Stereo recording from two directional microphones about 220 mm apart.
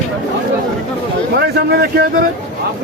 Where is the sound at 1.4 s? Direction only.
45° right (ahead or behind).